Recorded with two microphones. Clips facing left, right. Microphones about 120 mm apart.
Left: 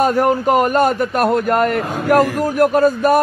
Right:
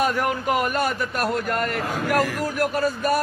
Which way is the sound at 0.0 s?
40° left (ahead or behind).